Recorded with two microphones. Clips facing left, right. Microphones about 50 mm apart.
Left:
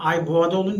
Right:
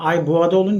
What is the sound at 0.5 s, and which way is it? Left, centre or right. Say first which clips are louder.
Speech: right 6 dB; right.